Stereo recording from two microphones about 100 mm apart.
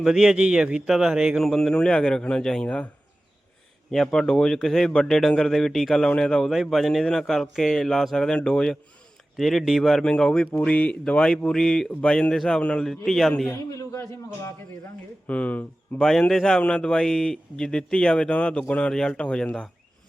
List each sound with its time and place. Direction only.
0.0 s a man's voice: 5° right (ahead or behind); by 2.9 s 10° left (ahead or behind)
3.9 s a man's voice: 5° left (ahead or behind)
13.5 s a man's voice: 30° left (ahead or behind)
15.3 s speech: 15° left (ahead or behind)
16.0 s speech: 5° left (ahead or behind)